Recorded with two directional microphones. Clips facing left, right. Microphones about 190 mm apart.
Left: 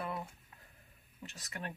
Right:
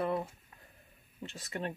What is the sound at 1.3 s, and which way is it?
Speech, 25° right (ahead or behind).